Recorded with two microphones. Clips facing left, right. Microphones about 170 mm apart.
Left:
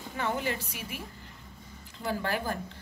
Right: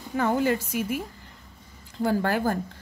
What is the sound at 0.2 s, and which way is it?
Speech, 45° right (ahead or behind).